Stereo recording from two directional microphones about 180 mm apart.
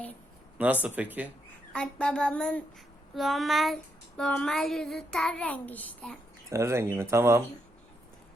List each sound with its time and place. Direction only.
0.6 s speech: 10° right (ahead or behind)
1.7 s child singing: 5° left (ahead or behind)
6.5 s speech: 15° right (ahead or behind)